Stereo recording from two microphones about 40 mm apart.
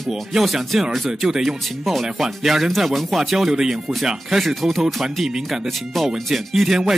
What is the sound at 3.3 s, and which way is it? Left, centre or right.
Speech, centre.